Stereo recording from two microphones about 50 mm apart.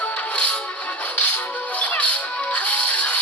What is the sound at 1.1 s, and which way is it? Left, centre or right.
Music, left.